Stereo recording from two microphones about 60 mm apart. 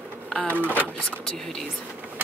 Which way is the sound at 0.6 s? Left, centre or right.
Right.